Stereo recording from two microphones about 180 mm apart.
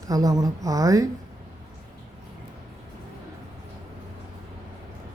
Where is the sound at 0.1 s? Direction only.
20° right (ahead or behind).